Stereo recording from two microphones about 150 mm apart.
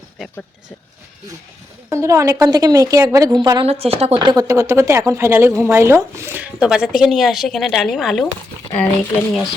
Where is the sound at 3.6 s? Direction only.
40° right (ahead or behind).